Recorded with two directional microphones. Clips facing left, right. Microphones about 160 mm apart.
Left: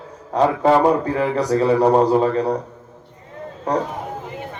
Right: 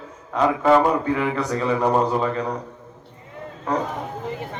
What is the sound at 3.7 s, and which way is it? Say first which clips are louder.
Speech: left 3 dB; 35° left (ahead or behind).